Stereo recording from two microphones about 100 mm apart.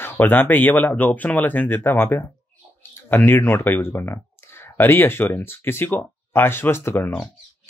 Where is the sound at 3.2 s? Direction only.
20° left (ahead or behind).